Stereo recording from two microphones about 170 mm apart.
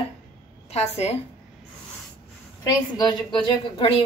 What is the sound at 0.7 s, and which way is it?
Speech, 40° left (ahead or behind).